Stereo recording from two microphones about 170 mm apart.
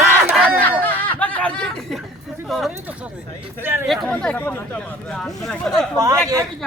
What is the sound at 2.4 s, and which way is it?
Speech, centre (ahead or behind).